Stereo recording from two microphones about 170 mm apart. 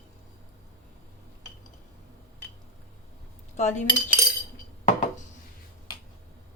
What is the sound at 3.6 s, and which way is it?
Speech, 45° left (ahead or behind).